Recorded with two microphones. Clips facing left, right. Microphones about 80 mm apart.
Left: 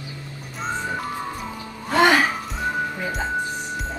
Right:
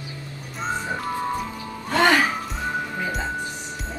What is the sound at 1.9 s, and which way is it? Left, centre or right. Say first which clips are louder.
Music: left 2 dB; centre.